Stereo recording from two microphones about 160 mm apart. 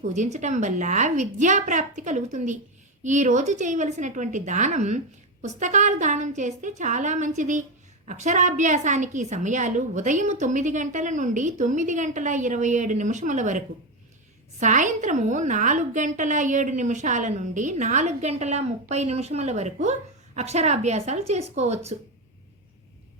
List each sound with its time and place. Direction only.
0.0 s a woman's voice: 50° right (ahead or behind)
14.6 s a woman's voice: 50° right (ahead or behind)